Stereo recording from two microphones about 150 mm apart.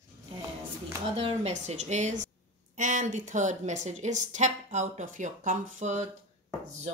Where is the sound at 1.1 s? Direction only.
35° right (ahead or behind).